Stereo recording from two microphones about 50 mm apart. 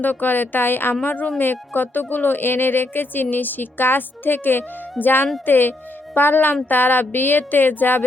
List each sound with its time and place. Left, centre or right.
0.0 s speech: left
1.0 s speech: left